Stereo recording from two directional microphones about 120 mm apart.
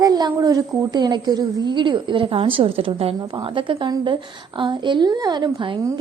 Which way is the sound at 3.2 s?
40° right (ahead or behind).